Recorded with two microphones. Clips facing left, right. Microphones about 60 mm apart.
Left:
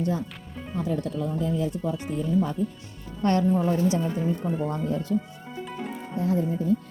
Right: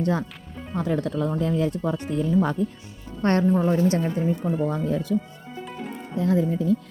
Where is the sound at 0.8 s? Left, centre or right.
Right.